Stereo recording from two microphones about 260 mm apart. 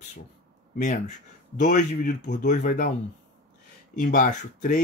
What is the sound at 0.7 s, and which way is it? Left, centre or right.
Speech, left.